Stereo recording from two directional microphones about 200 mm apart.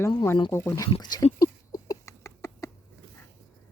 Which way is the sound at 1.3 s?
15° left (ahead or behind).